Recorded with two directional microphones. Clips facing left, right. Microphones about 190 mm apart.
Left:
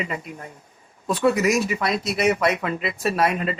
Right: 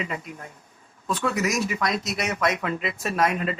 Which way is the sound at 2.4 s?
15° left (ahead or behind).